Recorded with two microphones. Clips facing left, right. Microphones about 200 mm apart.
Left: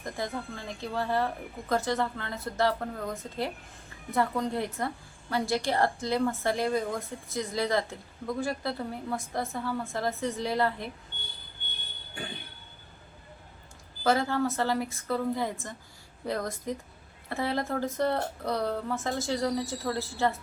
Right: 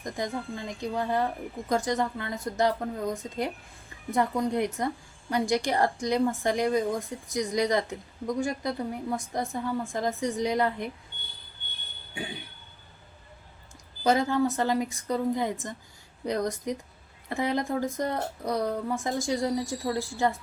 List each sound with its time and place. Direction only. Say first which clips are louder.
0.0 s a woman's voice: right 2 dB; 15° right (ahead or behind)
14.0 s a woman's voice: right 2 dB; 15° right (ahead or behind)